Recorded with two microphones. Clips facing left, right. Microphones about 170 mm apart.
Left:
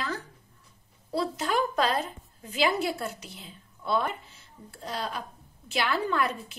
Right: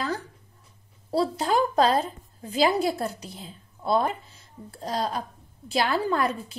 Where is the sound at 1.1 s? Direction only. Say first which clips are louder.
Right 4 dB; 35° right (ahead or behind).